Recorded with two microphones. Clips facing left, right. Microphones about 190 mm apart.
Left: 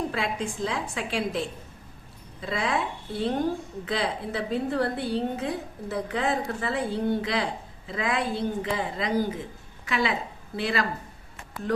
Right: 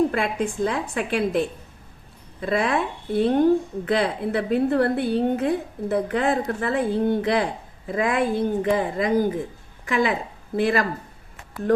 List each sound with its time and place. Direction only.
0.1 s a woman's voice: 55° right (ahead or behind)